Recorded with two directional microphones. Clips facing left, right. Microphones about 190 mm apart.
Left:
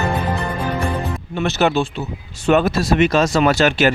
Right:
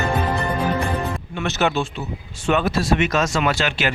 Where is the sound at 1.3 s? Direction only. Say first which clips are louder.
Left 4 dB; 35° left (ahead or behind).